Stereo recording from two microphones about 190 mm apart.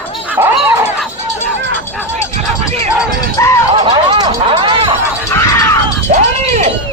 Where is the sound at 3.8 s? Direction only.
25° right (ahead or behind).